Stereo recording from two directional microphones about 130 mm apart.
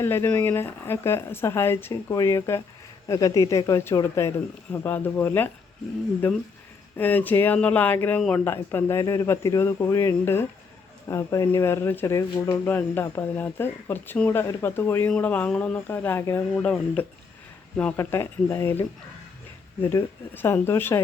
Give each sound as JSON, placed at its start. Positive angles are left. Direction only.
{"t": 0.0, "sound": "speech", "side_deg": 15}
{"t": 17.9, "sound": "speech", "side_deg": 20}